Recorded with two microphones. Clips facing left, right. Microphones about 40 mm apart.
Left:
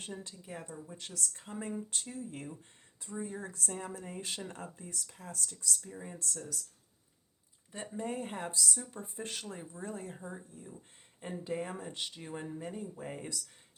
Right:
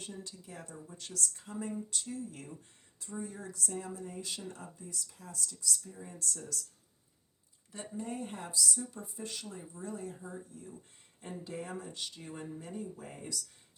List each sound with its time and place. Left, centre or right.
0.0 s speech: left
0.4 s speech: left
3.2 s speech: left
5.9 s speech: left
7.9 s speech: left